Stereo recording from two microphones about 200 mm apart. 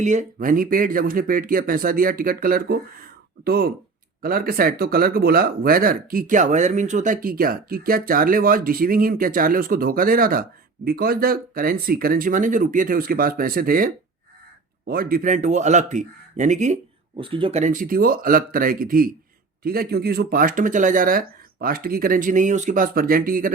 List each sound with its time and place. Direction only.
0.0 s speech: 35° right (ahead or behind)
17.2 s speech: 25° right (ahead or behind)
17.6 s speech: 40° right (ahead or behind)